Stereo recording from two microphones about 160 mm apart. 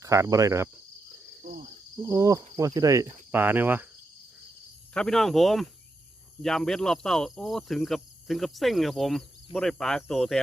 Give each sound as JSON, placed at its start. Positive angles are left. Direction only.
{"t": 0.0, "sound": "speech", "side_deg": -20}
{"t": 1.4, "sound": "cricket", "side_deg": -60}
{"t": 2.0, "sound": "speech", "side_deg": -20}
{"t": 4.9, "sound": "speech", "side_deg": 5}